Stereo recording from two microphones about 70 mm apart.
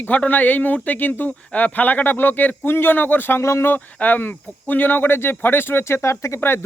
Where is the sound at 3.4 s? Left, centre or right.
Left.